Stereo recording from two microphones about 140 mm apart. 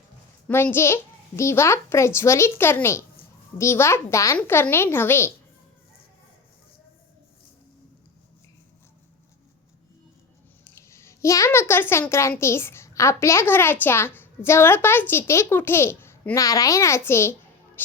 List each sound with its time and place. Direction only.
0.4 s a woman's voice: 15° left (ahead or behind)
10.6 s a sound: 20° left (ahead or behind)
12.4 s a child's voice: 20° left (ahead or behind)
17.8 s music: 15° left (ahead or behind)